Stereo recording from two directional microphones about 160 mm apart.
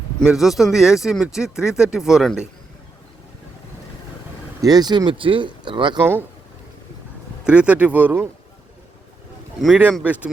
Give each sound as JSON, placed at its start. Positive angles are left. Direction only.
{"t": 0.2, "sound": "speech", "side_deg": 0}
{"t": 4.6, "sound": "speech", "side_deg": -25}
{"t": 7.4, "sound": "speech", "side_deg": -5}
{"t": 9.6, "sound": "speech", "side_deg": -5}